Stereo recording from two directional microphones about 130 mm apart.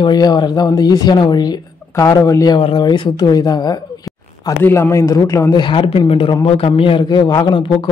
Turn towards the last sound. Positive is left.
turn(degrees=40)  # may be behind; listen again after turning